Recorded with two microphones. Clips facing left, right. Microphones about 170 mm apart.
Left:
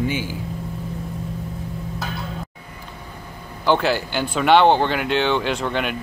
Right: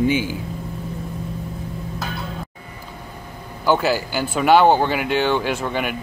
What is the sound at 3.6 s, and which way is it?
Speech, 5° right (ahead or behind).